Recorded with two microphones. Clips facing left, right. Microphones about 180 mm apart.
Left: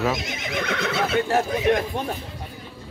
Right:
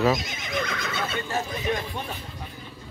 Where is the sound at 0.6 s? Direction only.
75° left (ahead or behind).